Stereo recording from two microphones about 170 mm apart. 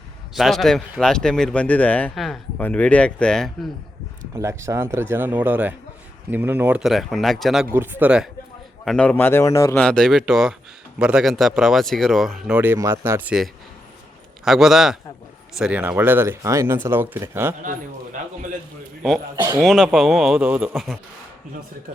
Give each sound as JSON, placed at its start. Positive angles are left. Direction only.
{"t": 0.3, "sound": "speech", "side_deg": 0}
{"t": 4.4, "sound": "speech", "side_deg": -15}
{"t": 8.8, "sound": "speech", "side_deg": 5}
{"t": 9.8, "sound": "speech", "side_deg": 5}
{"t": 17.6, "sound": "a man's voice", "side_deg": -50}
{"t": 19.4, "sound": "speech", "side_deg": -20}
{"t": 19.6, "sound": "speech", "side_deg": 0}